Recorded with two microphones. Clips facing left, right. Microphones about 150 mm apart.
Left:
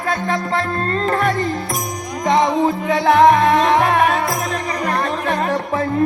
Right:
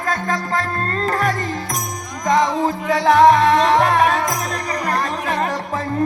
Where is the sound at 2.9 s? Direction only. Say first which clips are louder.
Even; 35° right (ahead or behind).